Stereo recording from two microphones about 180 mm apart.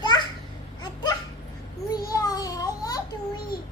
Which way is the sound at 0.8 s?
25° left (ahead or behind).